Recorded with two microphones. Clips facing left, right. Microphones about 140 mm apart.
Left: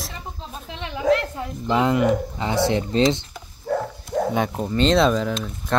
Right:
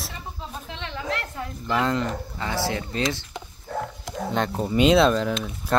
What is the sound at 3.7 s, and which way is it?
Dog, 90° left.